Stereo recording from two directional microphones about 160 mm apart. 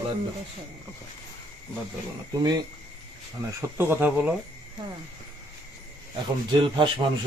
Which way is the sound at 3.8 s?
10° right (ahead or behind).